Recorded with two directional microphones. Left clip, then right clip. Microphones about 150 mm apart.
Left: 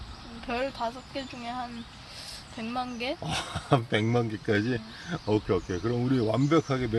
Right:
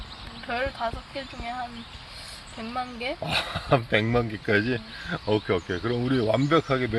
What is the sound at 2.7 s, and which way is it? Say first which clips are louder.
Speech: right 1 dB; 25° left (ahead or behind).